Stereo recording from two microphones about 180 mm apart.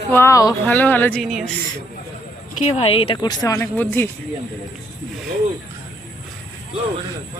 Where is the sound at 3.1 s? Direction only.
15° left (ahead or behind).